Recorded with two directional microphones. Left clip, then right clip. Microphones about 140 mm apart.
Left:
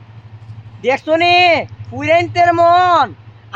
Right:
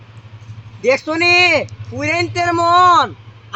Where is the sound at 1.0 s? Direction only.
55° left (ahead or behind).